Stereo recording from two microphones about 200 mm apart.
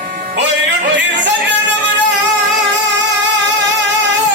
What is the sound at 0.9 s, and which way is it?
Music, 60° right (ahead or behind).